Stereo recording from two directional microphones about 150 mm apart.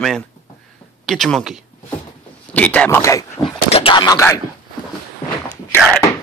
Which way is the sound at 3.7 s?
35° left (ahead or behind).